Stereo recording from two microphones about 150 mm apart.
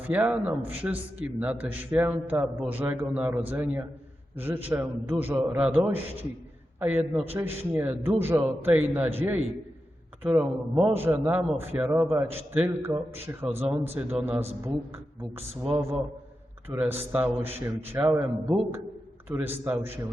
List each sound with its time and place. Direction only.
0.0 s a man's voice: 10° right (ahead or behind)
16.6 s a man's voice: 15° right (ahead or behind)
19.3 s a man's voice: 15° right (ahead or behind)